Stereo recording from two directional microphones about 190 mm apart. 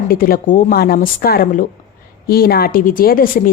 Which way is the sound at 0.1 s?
50° left (ahead or behind).